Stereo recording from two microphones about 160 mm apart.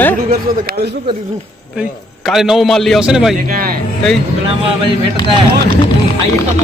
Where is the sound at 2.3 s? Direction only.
Centre (ahead or behind).